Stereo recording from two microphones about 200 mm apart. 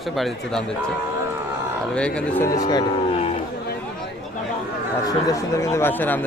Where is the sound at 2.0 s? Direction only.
5° left (ahead or behind).